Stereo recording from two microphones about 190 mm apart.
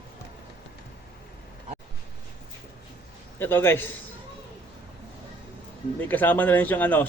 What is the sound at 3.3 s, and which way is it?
Speech, 10° left (ahead or behind).